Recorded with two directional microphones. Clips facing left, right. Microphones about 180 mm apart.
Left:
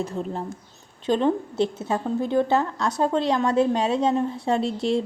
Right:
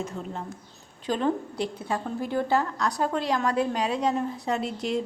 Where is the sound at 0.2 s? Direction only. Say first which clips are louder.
Left 6 dB; 30° left (ahead or behind).